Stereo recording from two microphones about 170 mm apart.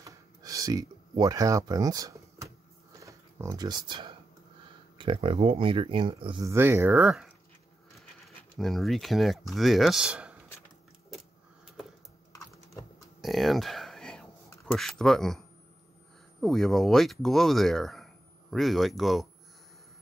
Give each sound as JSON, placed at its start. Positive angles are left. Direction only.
{"t": 0.0, "sound": "a sound", "side_deg": -20}
{"t": 3.0, "sound": "speech", "side_deg": -20}
{"t": 6.4, "sound": "speech", "side_deg": -15}
{"t": 8.5, "sound": "speech", "side_deg": 0}
{"t": 13.2, "sound": "a sound", "side_deg": 0}
{"t": 14.8, "sound": "speech", "side_deg": 0}